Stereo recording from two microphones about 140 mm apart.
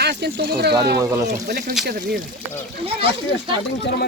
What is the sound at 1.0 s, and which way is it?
Speech, 25° right (ahead or behind).